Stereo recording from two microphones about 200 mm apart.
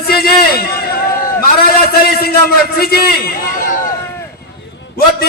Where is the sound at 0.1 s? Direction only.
50° left (ahead or behind).